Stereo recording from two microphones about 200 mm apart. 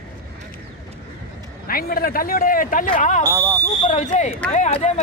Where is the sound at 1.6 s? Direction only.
45° left (ahead or behind).